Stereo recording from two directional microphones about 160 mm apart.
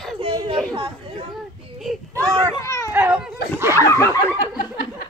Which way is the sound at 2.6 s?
20° left (ahead or behind).